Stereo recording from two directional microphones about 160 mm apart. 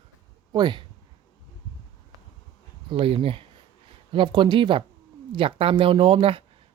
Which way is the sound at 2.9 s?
35° right (ahead or behind).